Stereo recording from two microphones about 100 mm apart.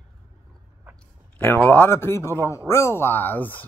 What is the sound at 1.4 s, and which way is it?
Speech, 20° left (ahead or behind).